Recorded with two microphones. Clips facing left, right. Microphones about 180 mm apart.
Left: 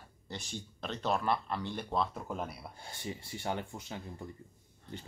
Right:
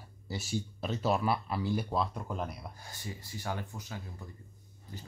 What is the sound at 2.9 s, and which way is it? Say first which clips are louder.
Speech: left 4 dB; 25° left (ahead or behind).